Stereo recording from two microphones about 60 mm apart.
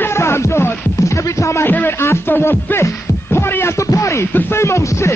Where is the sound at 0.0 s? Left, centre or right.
Left.